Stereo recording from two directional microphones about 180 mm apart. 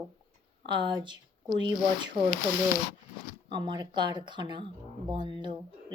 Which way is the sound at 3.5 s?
25° right (ahead or behind).